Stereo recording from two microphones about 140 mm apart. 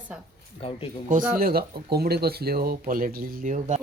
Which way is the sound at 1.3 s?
90° right.